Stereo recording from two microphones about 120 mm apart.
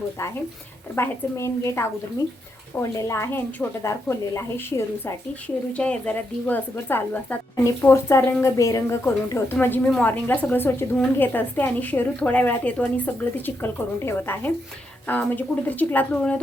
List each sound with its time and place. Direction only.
0.9 s a woman's voice: 20° left (ahead or behind)
3.0 s a woman's voice: 25° left (ahead or behind)
5.7 s a woman's voice: 10° left (ahead or behind)